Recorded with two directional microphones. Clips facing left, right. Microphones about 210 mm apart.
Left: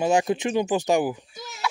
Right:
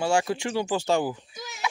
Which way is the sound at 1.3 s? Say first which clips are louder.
Even; centre (ahead or behind).